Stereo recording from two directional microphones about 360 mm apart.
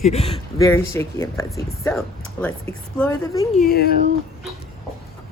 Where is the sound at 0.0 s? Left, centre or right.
Centre.